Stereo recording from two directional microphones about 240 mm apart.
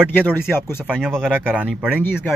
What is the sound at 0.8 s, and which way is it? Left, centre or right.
Speech, centre.